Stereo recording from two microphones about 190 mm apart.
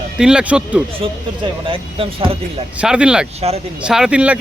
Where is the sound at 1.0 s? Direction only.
30° right (ahead or behind).